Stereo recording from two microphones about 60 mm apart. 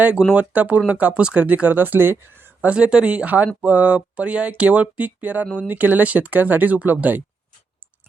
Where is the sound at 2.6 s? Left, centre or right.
Centre.